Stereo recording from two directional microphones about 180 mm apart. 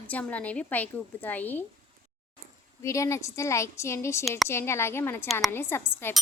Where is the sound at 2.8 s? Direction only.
15° left (ahead or behind).